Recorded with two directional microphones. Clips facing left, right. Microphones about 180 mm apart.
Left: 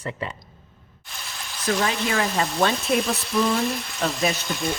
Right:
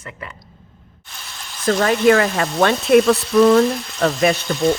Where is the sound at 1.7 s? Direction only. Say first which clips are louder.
Right 10 dB; 55° right (ahead or behind); by 4.3 s 70° right (ahead or behind).